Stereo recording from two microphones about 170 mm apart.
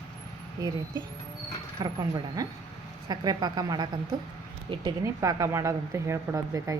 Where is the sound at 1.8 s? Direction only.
20° right (ahead or behind).